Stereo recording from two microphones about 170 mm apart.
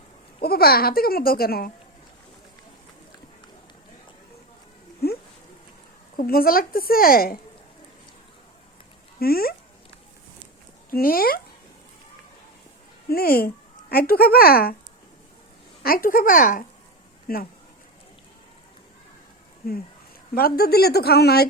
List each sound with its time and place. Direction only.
0.4 s a child's voice: 65° left (ahead or behind)
5.0 s a sound: 65° left (ahead or behind)
6.1 s a child's voice: 60° left (ahead or behind)
9.1 s speech: 60° left (ahead or behind)
10.9 s a child's voice: 60° left (ahead or behind)
13.1 s a child's voice: 60° left (ahead or behind)
15.8 s a woman's voice: 60° left (ahead or behind)
19.6 s a child's voice: 60° left (ahead or behind)